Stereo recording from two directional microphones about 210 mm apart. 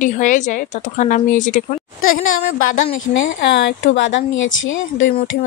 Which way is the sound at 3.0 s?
65° left (ahead or behind).